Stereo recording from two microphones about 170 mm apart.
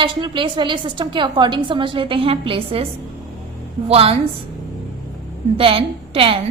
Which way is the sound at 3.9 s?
35° right (ahead or behind).